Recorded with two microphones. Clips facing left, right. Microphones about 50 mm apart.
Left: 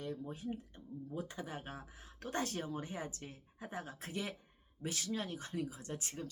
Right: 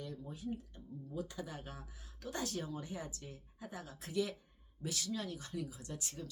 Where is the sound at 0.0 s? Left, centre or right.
Left.